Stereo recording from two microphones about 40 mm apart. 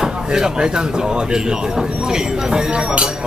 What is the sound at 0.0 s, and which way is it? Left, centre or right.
Speech, centre.